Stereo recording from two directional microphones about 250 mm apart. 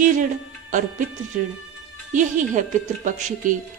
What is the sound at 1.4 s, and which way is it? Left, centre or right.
Speech, right.